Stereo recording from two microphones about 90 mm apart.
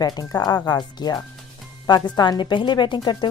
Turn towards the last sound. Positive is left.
turn(degrees=55)  # may be behind; listen again after turning